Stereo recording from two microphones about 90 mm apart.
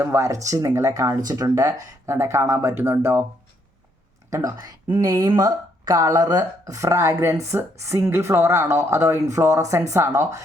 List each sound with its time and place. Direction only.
0.0 s speech: 30° right (ahead or behind)
4.3 s speech: 40° right (ahead or behind)